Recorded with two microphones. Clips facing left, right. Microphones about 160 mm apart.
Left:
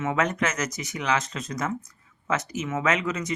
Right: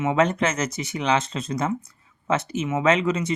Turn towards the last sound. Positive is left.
turn(degrees=-30)  # may be behind; listen again after turning